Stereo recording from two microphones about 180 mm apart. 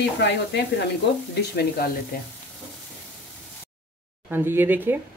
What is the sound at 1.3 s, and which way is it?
Speech, 65° left (ahead or behind).